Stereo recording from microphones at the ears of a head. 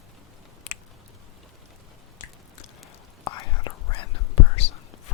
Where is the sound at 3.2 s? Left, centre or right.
Left.